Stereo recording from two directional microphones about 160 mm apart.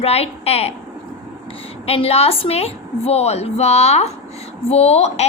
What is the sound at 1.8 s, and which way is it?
A woman's voice, 40° left (ahead or behind).